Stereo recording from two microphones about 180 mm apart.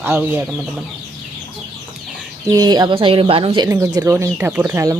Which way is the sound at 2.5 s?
20° right (ahead or behind).